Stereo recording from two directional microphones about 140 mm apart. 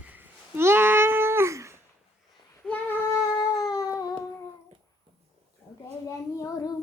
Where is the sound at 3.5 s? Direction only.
25° left (ahead or behind).